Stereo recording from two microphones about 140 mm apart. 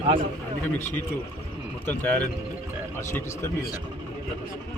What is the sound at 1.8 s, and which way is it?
A man's voice, 10° left (ahead or behind).